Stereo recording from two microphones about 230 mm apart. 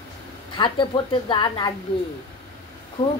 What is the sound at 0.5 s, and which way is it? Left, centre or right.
Speech, left.